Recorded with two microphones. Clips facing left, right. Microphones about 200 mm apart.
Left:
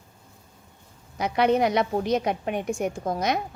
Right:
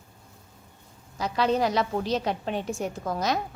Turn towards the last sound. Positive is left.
turn(degrees=20)  # may be behind; listen again after turning